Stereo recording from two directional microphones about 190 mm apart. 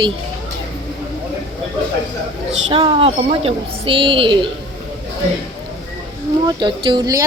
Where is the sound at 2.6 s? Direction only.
25° right (ahead or behind).